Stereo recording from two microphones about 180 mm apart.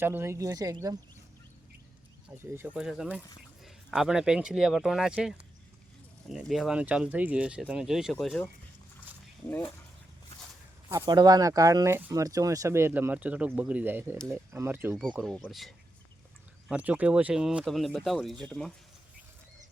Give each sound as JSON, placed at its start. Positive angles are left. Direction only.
{"t": 0.0, "sound": "speech", "side_deg": -10}
{"t": 2.3, "sound": "speech", "side_deg": -15}
{"t": 10.8, "sound": "speech", "side_deg": -25}